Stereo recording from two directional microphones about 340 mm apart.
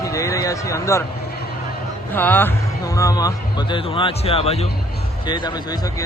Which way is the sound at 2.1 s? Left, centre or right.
Centre.